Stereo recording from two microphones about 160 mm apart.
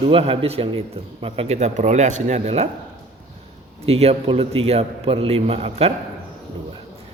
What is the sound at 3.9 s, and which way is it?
A man's voice, 40° right (ahead or behind).